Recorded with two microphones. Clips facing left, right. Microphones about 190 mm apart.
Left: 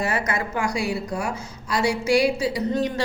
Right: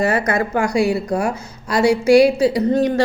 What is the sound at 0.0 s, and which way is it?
A woman's voice, 60° right (ahead or behind).